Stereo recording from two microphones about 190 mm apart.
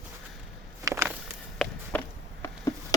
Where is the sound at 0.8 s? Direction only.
10° right (ahead or behind).